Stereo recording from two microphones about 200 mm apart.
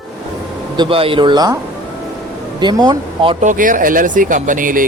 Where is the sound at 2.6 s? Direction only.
20° right (ahead or behind).